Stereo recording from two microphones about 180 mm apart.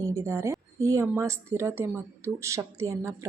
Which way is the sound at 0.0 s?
15° right (ahead or behind).